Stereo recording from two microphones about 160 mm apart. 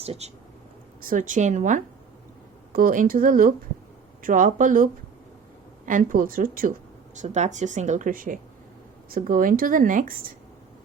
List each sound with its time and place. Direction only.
0.0 s speech: 40° right (ahead or behind)
1.0 s speech: 55° right (ahead or behind)
7.2 s speech: 50° right (ahead or behind)